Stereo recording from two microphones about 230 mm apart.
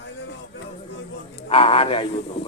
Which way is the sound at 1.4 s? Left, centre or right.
Left.